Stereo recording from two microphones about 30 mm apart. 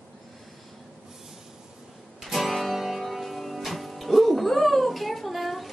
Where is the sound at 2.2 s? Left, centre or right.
Centre.